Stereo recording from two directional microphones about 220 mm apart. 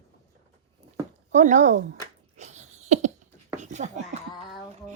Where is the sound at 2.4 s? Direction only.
30° right (ahead or behind).